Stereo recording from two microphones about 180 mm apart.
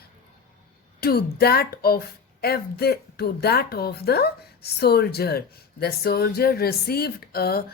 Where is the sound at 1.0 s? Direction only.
60° left (ahead or behind).